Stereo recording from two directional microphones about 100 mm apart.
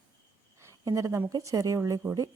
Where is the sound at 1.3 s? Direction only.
30° right (ahead or behind).